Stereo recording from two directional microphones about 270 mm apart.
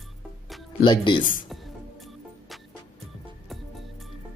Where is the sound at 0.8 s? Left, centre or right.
Centre.